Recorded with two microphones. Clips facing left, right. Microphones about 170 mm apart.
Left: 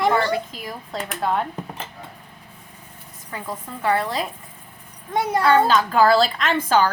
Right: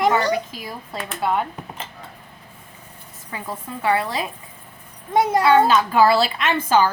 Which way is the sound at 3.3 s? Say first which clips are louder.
Right 1 dB; 10° right (ahead or behind).